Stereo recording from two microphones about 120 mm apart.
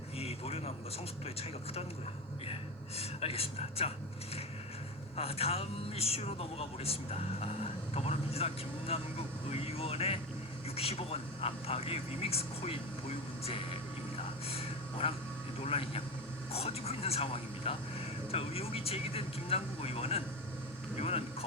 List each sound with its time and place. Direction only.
0.2 s vehicle: 55° left (ahead or behind)
2.5 s speech: 55° left (ahead or behind)
5.1 s speech: 55° left (ahead or behind)
14.5 s a sound: 55° left (ahead or behind)
15.6 s a man's voice: 55° left (ahead or behind)